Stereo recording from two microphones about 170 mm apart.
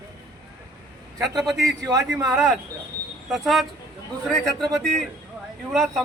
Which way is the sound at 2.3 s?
Centre (ahead or behind).